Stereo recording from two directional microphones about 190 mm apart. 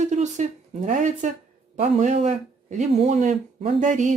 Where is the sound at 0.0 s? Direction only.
40° right (ahead or behind).